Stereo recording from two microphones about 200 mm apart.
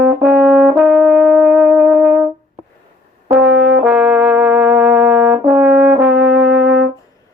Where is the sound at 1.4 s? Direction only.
10° right (ahead or behind).